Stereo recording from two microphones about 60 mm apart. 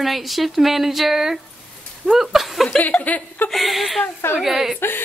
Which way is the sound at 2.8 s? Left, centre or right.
Left.